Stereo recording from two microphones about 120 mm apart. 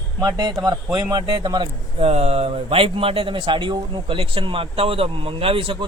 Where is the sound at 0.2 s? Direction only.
35° right (ahead or behind).